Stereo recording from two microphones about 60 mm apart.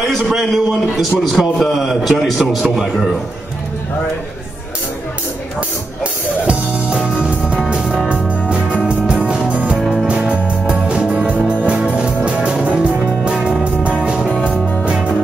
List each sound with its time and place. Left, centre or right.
0.2 s a man's voice: centre
6.4 s music: right
9.2 s music: centre
9.8 s music: centre